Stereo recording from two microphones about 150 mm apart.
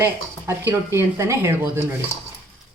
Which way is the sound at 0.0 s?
15° right (ahead or behind).